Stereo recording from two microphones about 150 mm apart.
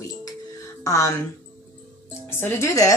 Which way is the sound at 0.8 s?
20° left (ahead or behind).